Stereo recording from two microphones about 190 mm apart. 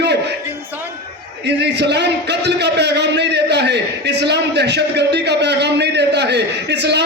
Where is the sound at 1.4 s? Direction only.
60° right (ahead or behind).